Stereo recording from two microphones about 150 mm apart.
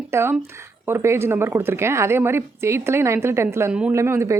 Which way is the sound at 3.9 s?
20° right (ahead or behind).